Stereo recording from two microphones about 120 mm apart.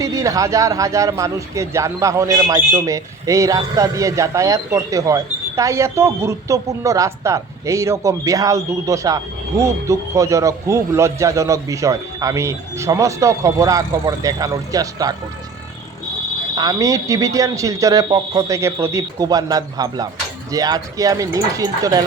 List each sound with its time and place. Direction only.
0.0 s speech: 30° right (ahead or behind)
16.6 s speech: 30° right (ahead or behind)